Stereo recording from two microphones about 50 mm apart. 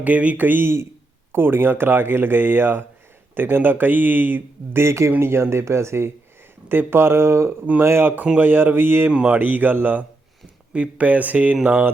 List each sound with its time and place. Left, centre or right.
0.0 s a man's voice: right
4.8 s a man's voice: right
6.7 s speech: right
7.8 s a man's voice: right
10.7 s a man's voice: right